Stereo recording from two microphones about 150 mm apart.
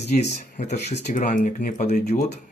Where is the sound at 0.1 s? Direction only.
50° left (ahead or behind).